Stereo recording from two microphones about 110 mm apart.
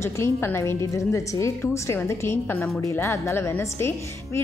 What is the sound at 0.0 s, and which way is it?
A woman's voice, 25° left (ahead or behind).